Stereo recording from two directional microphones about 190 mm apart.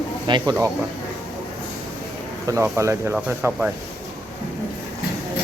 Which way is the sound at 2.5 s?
15° right (ahead or behind).